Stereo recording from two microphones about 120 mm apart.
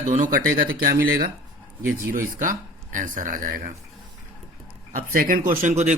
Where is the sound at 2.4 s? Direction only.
90° right.